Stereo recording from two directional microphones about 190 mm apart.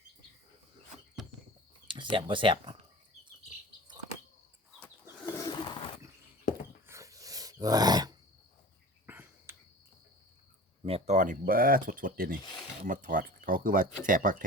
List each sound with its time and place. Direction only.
1.9 s speech: 25° right (ahead or behind)
5.2 s bird: 15° left (ahead or behind)
6.8 s dog: 15° right (ahead or behind)
9.0 s cricket: 10° right (ahead or behind)
10.8 s speech: 35° right (ahead or behind)